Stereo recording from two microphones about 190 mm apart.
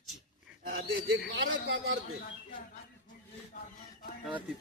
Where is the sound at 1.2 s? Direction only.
60° right (ahead or behind).